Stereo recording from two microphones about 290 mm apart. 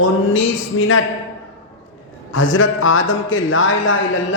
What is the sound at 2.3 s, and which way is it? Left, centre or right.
Speech, left.